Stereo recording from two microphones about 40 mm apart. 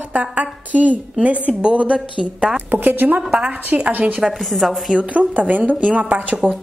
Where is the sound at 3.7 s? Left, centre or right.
Right.